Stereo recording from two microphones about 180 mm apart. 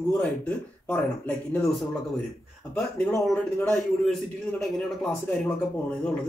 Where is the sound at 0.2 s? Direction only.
5° left (ahead or behind).